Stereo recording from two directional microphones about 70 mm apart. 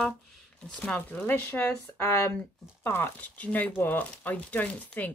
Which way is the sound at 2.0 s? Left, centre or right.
Left.